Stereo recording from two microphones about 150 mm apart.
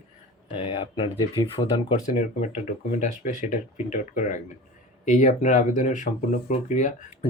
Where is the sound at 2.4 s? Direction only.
55° left (ahead or behind).